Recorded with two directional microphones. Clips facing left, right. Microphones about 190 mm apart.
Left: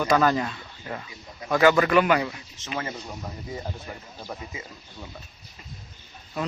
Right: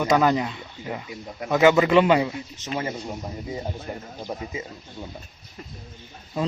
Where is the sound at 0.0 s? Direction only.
20° right (ahead or behind).